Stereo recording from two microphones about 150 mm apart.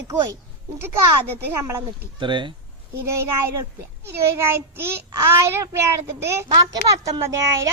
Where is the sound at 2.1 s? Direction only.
30° right (ahead or behind).